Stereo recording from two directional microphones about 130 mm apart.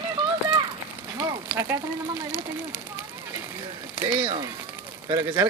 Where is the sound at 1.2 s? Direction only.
20° right (ahead or behind).